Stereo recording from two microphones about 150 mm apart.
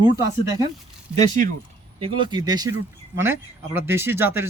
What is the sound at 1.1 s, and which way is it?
Speech, 10° right (ahead or behind).